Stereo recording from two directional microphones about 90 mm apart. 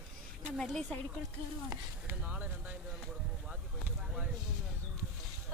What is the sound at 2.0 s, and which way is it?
Speech, 20° right (ahead or behind).